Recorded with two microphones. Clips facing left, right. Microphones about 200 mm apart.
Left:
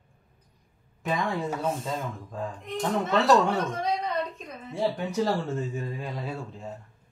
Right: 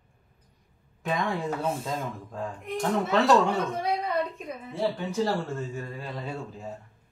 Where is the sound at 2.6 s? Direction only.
10° right (ahead or behind).